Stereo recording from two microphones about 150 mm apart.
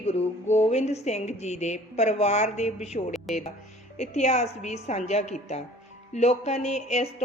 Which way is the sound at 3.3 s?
Centre (ahead or behind).